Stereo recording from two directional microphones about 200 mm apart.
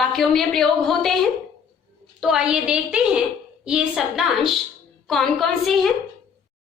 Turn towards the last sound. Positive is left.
turn(degrees=0)  # may be behind; listen again after turning